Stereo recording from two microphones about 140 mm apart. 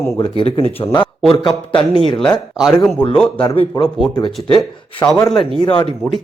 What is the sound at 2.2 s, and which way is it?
Speech, 5° left (ahead or behind).